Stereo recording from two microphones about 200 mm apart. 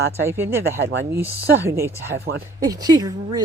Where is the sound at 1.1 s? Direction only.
10° right (ahead or behind).